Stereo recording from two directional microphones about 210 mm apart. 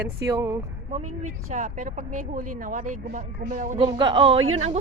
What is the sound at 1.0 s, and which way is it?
Speech, 90° right.